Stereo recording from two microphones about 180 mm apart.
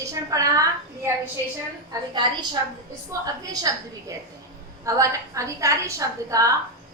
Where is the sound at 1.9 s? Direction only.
25° right (ahead or behind).